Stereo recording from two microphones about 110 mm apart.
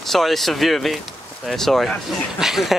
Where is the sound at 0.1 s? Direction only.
Centre (ahead or behind).